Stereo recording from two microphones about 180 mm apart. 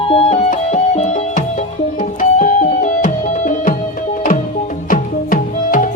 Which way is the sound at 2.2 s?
45° left (ahead or behind).